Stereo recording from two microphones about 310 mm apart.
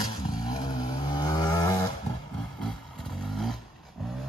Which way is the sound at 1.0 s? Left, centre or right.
Centre.